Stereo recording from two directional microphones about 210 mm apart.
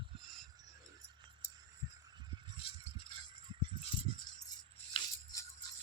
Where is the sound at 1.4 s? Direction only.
10° left (ahead or behind).